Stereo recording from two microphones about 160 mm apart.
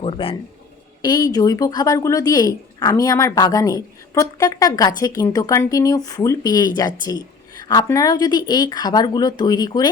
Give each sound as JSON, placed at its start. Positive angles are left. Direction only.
{"t": 0.0, "sound": "a man's voice", "side_deg": 35}
{"t": 7.0, "sound": "a sound", "side_deg": 25}
{"t": 7.7, "sound": "speech", "side_deg": 20}